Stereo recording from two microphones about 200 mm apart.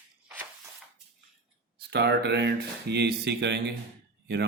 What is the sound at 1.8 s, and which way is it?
Speech, 55° right (ahead or behind).